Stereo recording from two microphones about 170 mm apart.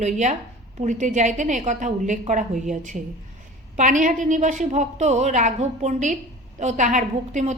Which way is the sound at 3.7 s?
50° right (ahead or behind).